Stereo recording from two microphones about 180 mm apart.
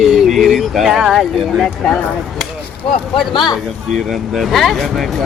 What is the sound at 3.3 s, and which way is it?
Speech, 25° left (ahead or behind).